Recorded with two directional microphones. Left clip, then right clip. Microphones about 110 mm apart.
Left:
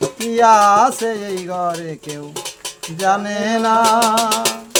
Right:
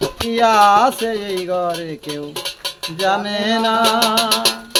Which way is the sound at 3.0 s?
30° left (ahead or behind).